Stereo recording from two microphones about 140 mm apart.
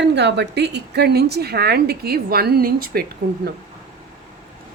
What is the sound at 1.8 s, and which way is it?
A woman's voice, 90° right.